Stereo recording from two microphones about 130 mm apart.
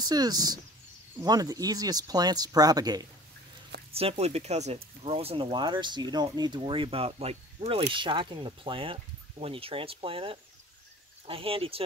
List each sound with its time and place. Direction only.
0.0 s speech: 30° right (ahead or behind)
3.9 s speech: 50° right (ahead or behind)
7.9 s speech: 40° right (ahead or behind)